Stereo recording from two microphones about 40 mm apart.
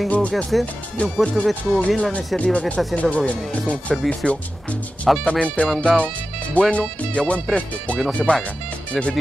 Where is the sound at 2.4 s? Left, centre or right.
Left.